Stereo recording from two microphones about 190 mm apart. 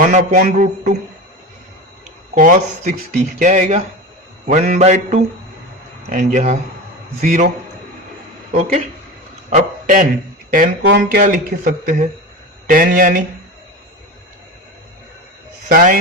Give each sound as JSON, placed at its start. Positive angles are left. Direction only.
{"t": 0.0, "sound": "speech", "side_deg": -45}
{"t": 2.3, "sound": "speech", "side_deg": -45}
{"t": 4.4, "sound": "mantra", "side_deg": -45}
{"t": 7.2, "sound": "speech", "side_deg": -45}
{"t": 9.6, "sound": "speech", "side_deg": -40}
{"t": 10.8, "sound": "speech", "side_deg": -55}
{"t": 15.7, "sound": "speech", "side_deg": -45}